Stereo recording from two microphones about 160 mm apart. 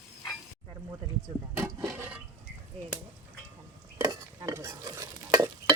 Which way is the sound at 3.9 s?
20° right (ahead or behind).